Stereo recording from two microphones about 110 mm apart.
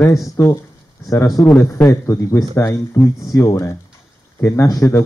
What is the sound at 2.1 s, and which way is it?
Speech, 30° left (ahead or behind).